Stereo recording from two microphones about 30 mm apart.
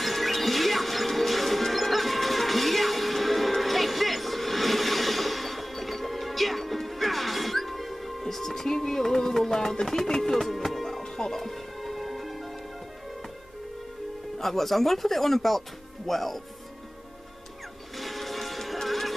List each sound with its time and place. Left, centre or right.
0.0 s music: centre
11.4 s music: centre
14.4 s speech: centre
17.9 s music: centre